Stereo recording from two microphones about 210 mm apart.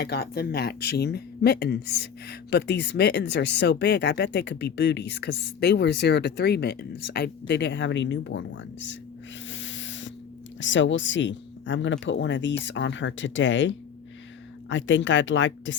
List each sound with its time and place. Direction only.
0.0 s speech: 50° left (ahead or behind)
9.5 s owl: 60° left (ahead or behind)
10.6 s speech: 60° left (ahead or behind)